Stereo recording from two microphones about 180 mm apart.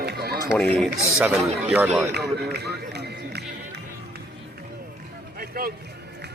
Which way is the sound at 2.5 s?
65° right (ahead or behind).